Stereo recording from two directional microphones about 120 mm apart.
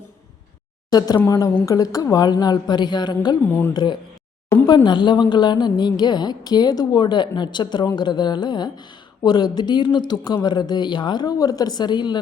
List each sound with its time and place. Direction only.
0.9 s a woman's voice: 35° left (ahead or behind)
3.4 s speech: 15° left (ahead or behind)
4.6 s a woman's voice: 35° left (ahead or behind)